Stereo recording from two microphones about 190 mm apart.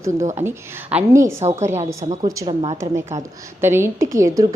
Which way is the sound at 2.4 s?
30° right (ahead or behind).